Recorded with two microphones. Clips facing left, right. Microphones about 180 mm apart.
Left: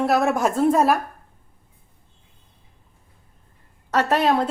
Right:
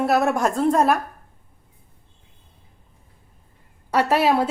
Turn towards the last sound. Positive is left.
turn(degrees=-10)  # may be behind; listen again after turning